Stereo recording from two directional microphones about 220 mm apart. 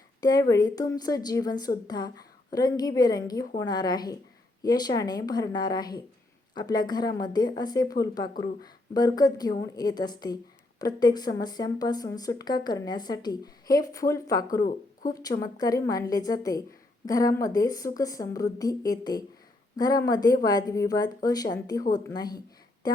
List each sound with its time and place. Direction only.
0.2 s a woman's voice: 15° left (ahead or behind)